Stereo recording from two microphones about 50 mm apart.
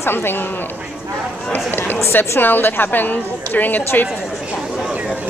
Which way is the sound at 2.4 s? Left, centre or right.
Left.